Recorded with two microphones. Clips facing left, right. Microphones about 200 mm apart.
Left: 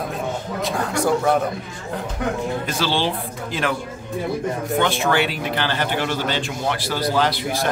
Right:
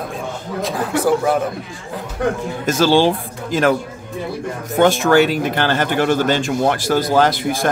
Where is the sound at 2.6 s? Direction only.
45° right (ahead or behind).